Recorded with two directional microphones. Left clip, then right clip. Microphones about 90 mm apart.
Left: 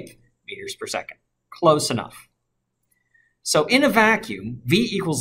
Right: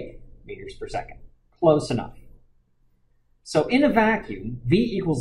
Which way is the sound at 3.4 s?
20° left (ahead or behind).